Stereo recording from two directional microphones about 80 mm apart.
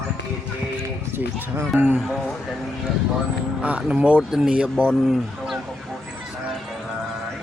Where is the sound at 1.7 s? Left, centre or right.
Right.